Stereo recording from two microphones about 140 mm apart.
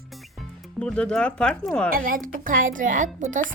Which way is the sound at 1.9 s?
85° right.